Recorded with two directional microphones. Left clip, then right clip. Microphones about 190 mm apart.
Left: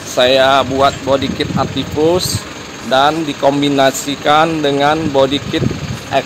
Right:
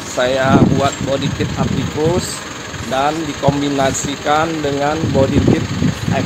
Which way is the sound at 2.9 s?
35° left (ahead or behind).